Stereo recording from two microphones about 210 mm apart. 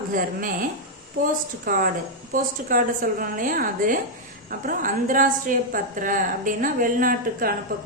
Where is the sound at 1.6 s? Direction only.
45° right (ahead or behind).